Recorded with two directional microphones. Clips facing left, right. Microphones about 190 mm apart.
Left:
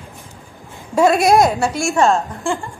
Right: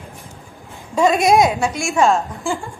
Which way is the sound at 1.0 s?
5° left (ahead or behind).